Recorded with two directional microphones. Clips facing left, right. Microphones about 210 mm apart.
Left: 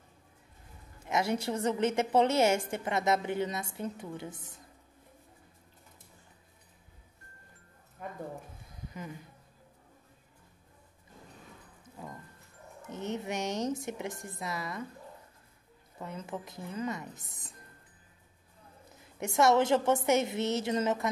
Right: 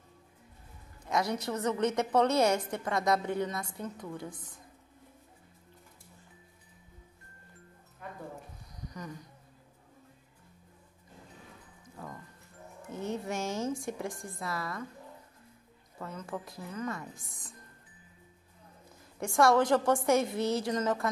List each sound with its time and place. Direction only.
1.1 s speech: 25° left (ahead or behind)
9.0 s a man's voice: 5° left (ahead or behind)
12.8 s speech: 20° left (ahead or behind)
16.0 s speech: 25° left (ahead or behind)
19.1 s speech: 20° left (ahead or behind)